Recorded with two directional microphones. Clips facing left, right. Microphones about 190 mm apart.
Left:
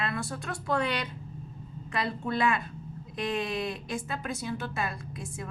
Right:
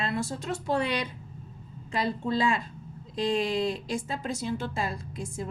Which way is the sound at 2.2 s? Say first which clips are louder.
Even; 25° right (ahead or behind).